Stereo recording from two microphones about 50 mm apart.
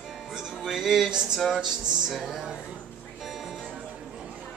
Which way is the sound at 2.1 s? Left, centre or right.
Centre.